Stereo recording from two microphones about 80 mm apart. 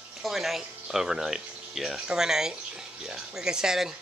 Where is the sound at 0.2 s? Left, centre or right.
Centre.